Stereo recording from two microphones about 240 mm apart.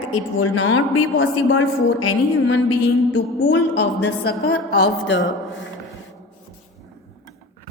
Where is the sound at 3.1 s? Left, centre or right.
Left.